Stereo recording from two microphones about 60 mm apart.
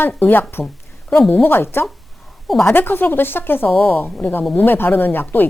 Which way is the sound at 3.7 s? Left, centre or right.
Centre.